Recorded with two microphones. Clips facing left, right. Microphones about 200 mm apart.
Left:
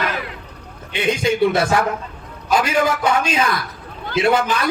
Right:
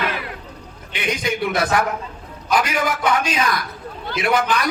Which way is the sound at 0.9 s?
25° left (ahead or behind).